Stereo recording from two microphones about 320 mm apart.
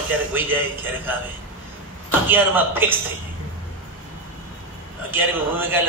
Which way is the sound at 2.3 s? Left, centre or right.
Centre.